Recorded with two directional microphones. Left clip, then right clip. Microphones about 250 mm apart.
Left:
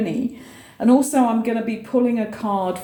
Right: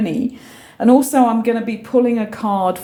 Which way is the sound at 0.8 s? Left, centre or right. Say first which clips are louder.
Right 4 dB; right.